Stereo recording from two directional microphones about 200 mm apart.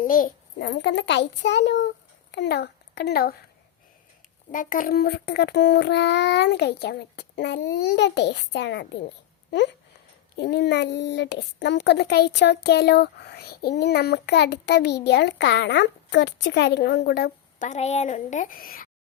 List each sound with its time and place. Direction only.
0.0 s a sound: 45° left (ahead or behind)
0.7 s a child's voice: 65° left (ahead or behind)
4.5 s a child's voice: 40° left (ahead or behind); by 8.9 s 60° left (ahead or behind)
10.3 s a child's voice: 55° left (ahead or behind)
17.7 s speech: 35° left (ahead or behind)